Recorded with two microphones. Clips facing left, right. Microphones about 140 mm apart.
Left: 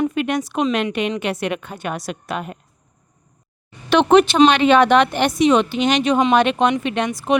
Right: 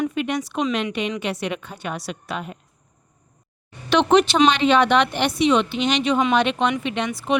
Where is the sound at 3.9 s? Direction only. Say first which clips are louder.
Left 3 dB; 50° left (ahead or behind).